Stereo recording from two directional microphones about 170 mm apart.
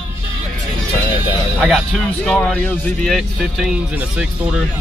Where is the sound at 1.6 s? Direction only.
Centre (ahead or behind).